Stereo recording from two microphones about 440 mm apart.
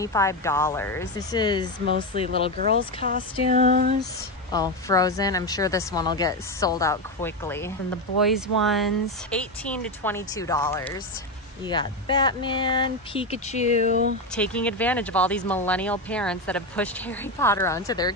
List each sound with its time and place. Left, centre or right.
0.0 s a woman's voice: centre
2.5 s speech: centre
3.1 s female singing: centre
4.0 s a woman's voice: centre
13.8 s speech: centre
14.3 s speech: centre